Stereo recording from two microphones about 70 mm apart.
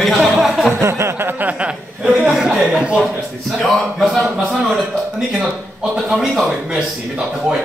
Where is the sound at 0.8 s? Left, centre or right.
Right; by 2.1 s centre.